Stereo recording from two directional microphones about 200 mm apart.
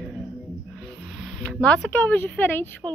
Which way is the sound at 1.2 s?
5° left (ahead or behind).